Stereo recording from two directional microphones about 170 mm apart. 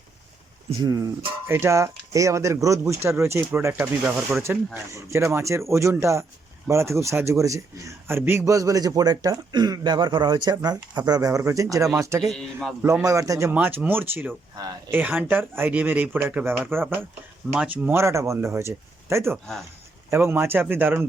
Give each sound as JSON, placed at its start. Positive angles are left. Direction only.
{"t": 0.8, "sound": "a man's voice", "side_deg": -20}
{"t": 14.5, "sound": "a man's voice", "side_deg": -20}
{"t": 14.9, "sound": "speech", "side_deg": -10}